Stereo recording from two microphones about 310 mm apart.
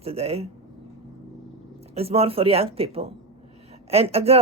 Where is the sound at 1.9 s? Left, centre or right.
Centre.